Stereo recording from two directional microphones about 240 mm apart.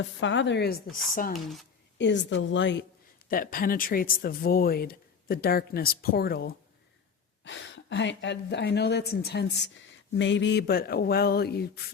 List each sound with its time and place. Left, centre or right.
0.0 s speech: left
3.2 s speech: left